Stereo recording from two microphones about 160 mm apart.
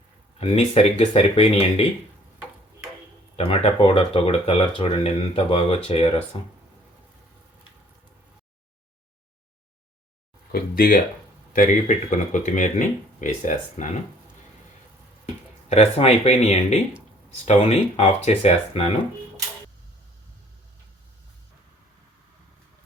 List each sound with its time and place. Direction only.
0.3 s speech: 40° left (ahead or behind)
3.3 s speech: 40° left (ahead or behind)
10.5 s speech: 70° left (ahead or behind)
11.5 s speech: 50° left (ahead or behind)
15.7 s speech: 40° left (ahead or behind)